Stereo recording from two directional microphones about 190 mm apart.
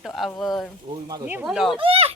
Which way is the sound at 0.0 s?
Centre (ahead or behind).